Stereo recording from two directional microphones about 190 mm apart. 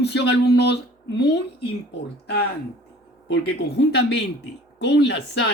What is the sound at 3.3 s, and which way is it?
Speech, 65° left (ahead or behind).